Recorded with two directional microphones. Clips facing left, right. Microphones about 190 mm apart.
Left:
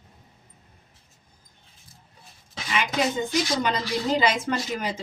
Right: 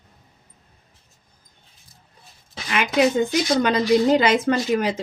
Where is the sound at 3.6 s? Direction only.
65° right (ahead or behind).